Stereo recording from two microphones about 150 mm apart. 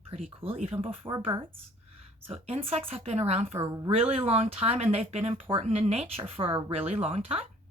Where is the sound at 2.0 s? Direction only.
40° right (ahead or behind).